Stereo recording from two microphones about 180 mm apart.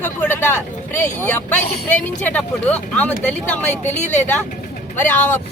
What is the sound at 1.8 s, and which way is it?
Speech, 10° left (ahead or behind).